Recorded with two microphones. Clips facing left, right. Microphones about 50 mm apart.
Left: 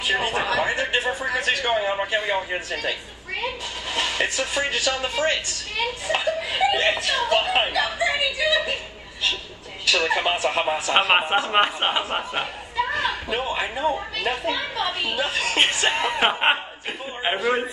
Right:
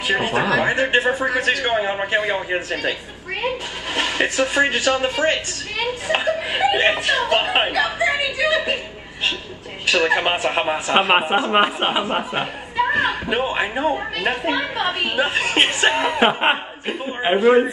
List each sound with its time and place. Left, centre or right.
0.1 s a woman's voice: right
9.8 s speech: right
10.7 s a man's voice: centre
11.5 s speech: centre
12.9 s speech: right
15.9 s speech: centre